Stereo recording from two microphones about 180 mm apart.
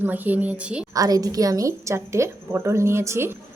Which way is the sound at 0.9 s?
20° right (ahead or behind).